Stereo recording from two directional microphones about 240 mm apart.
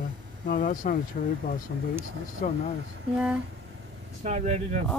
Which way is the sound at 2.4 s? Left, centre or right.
Left.